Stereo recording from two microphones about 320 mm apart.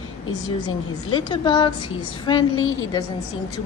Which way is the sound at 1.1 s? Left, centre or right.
Centre.